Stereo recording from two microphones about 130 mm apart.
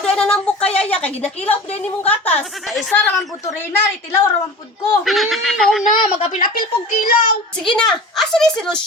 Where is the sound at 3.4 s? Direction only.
25° left (ahead or behind).